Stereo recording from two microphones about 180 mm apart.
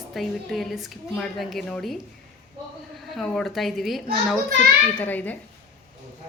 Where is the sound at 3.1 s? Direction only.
Centre (ahead or behind).